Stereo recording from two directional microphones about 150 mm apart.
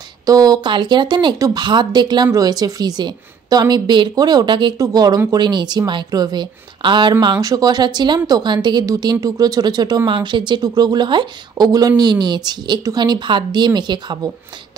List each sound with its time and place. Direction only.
0.3 s a woman's voice: 25° right (ahead or behind)